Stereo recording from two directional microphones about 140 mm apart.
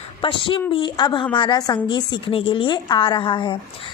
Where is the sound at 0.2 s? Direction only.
40° left (ahead or behind).